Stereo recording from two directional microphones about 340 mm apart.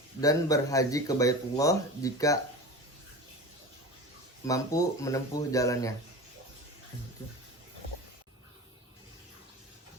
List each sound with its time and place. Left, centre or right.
0.2 s speech: centre
4.4 s speech: centre